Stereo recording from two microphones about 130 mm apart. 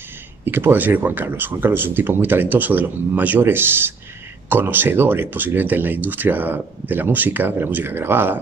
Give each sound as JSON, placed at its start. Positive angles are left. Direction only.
{"t": 0.5, "sound": "speech", "side_deg": -15}